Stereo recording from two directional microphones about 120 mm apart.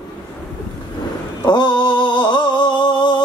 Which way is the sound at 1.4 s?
35° left (ahead or behind).